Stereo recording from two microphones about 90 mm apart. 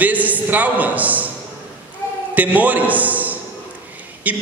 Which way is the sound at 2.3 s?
20° right (ahead or behind).